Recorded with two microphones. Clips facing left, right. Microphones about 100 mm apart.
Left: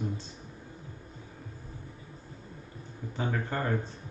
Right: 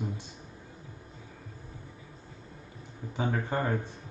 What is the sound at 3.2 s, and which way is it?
Speech, 15° right (ahead or behind).